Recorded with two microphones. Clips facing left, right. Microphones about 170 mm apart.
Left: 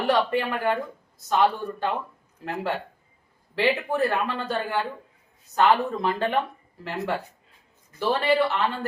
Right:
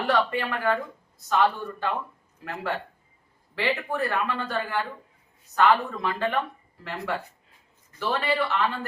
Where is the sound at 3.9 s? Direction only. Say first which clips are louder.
Left 3 dB; 30° left (ahead or behind).